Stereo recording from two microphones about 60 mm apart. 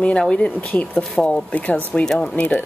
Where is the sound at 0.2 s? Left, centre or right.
Centre.